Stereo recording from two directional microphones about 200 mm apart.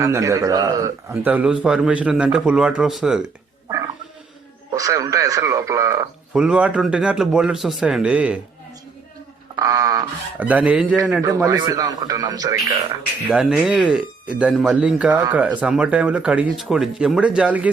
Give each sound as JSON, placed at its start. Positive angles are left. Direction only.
{"t": 0.0, "sound": "a man's voice", "side_deg": -15}
{"t": 4.7, "sound": "a man's voice", "side_deg": -15}
{"t": 6.3, "sound": "speech", "side_deg": -5}
{"t": 9.6, "sound": "a man's voice", "side_deg": -15}
{"t": 11.2, "sound": "a man's voice", "side_deg": -15}
{"t": 13.3, "sound": "speech", "side_deg": -5}